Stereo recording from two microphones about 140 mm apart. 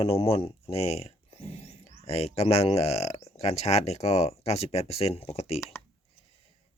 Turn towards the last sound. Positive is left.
turn(degrees=45)  # may be behind; listen again after turning